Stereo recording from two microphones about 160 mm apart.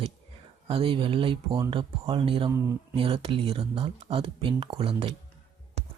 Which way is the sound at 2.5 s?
15° right (ahead or behind).